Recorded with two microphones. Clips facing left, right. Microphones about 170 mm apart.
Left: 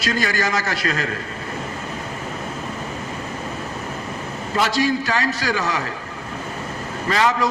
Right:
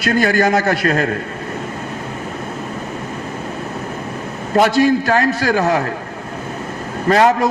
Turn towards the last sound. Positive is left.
turn(degrees=-55)  # may be behind; listen again after turning